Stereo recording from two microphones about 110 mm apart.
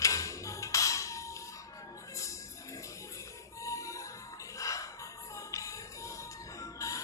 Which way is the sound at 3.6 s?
30° left (ahead or behind).